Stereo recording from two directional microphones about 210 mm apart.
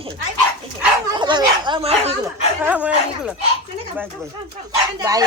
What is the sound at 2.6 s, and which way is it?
Speech, 5° right (ahead or behind).